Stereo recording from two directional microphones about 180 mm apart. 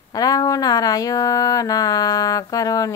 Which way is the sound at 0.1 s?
20° left (ahead or behind).